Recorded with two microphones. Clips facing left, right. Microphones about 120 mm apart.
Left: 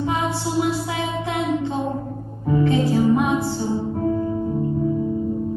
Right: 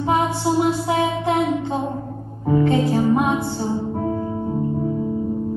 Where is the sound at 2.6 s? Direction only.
35° right (ahead or behind).